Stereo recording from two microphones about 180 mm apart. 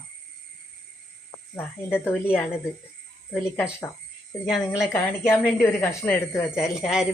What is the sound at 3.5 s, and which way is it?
Speech, 10° left (ahead or behind).